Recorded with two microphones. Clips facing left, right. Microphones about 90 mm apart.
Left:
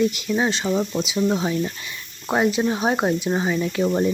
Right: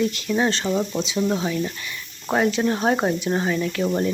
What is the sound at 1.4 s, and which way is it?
Speech, 20° left (ahead or behind).